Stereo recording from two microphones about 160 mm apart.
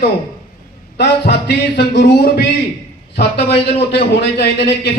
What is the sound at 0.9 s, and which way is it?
Speech, 90° left.